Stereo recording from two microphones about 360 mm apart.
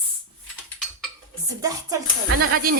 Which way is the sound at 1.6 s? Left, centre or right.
Centre.